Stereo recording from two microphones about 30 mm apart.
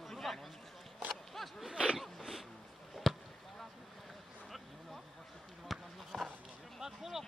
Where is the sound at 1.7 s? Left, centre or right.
Right.